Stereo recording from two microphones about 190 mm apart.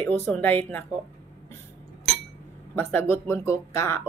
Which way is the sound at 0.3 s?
10° left (ahead or behind).